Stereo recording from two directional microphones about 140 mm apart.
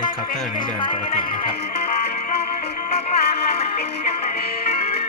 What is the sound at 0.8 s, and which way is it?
Speech, 35° left (ahead or behind).